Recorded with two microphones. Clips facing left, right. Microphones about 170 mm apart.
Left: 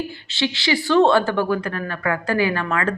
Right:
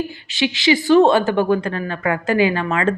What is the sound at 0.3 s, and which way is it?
Speech, 15° right (ahead or behind).